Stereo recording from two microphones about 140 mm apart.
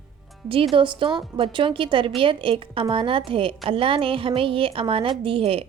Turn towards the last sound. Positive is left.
turn(degrees=-40)  # may be behind; listen again after turning